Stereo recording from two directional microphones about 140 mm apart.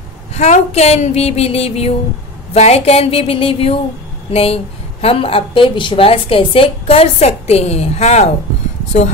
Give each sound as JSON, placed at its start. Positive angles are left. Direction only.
{"t": 0.3, "sound": "a woman's voice", "side_deg": 50}